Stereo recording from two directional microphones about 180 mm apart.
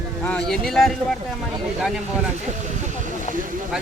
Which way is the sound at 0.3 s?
5° left (ahead or behind).